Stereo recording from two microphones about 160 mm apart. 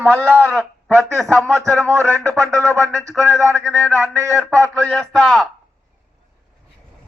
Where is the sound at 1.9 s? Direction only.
15° right (ahead or behind).